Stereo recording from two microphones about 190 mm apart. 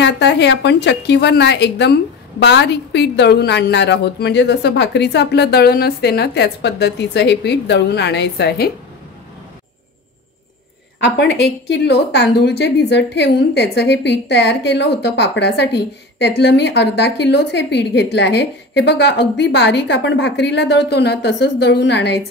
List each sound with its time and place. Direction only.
0.0 s a woman's voice: 65° left (ahead or behind)
11.0 s a woman's voice: 65° left (ahead or behind)